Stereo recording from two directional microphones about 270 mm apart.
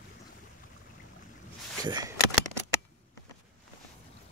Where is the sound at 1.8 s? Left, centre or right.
Centre.